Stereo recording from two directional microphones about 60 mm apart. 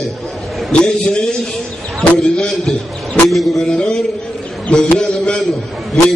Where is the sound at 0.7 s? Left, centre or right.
Centre.